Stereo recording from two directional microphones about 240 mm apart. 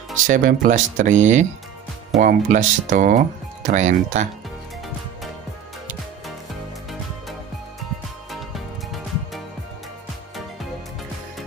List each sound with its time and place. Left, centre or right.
0.3 s speech: right
8.3 s music: centre